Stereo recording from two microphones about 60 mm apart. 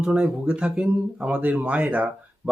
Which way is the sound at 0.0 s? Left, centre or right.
Centre.